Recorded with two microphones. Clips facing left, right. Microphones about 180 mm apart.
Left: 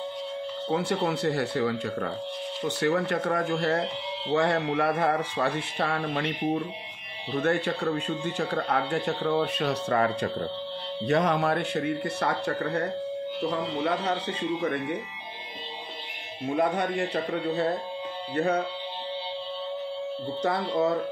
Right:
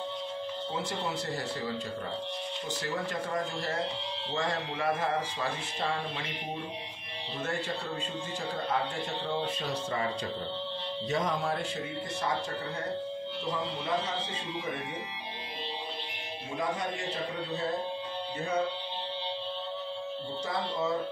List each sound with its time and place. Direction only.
0.7 s speech: 65° left (ahead or behind)
7.4 s speech: 65° left (ahead or behind)
16.5 s speech: 65° left (ahead or behind)
20.4 s speech: 65° left (ahead or behind)